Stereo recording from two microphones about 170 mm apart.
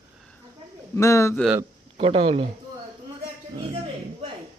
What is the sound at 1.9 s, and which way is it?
Speech, 35° right (ahead or behind).